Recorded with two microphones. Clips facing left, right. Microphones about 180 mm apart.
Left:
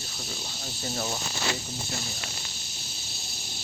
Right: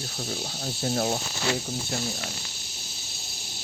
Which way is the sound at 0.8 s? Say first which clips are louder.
Right 6 dB; 55° right (ahead or behind).